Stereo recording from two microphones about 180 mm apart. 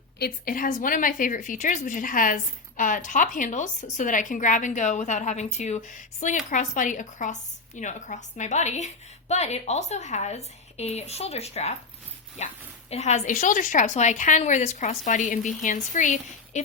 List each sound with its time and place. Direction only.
0.2 s a woman's voice: 55° left (ahead or behind)